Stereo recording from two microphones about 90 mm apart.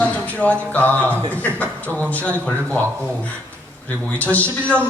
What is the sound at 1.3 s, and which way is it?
A man's voice, 20° left (ahead or behind).